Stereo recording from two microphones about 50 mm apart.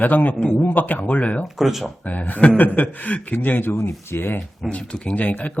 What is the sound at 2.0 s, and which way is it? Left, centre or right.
A man's voice, left.